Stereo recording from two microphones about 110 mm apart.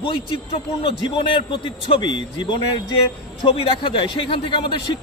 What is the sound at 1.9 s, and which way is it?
Speech, 50° left (ahead or behind).